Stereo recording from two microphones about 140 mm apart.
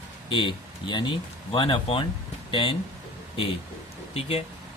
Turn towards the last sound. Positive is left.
turn(degrees=45)  # may be behind; listen again after turning